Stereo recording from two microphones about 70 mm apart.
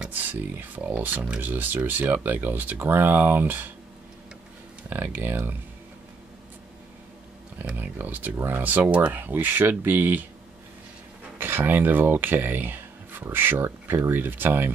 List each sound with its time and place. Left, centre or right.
0.1 s speech: right
4.8 s speech: right
7.5 s speech: right
11.3 s speech: right